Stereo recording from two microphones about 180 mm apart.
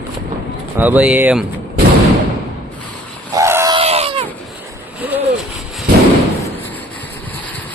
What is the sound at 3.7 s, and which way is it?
Screaming, 35° right (ahead or behind).